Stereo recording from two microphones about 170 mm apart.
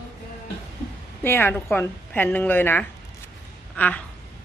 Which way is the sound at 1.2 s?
15° left (ahead or behind).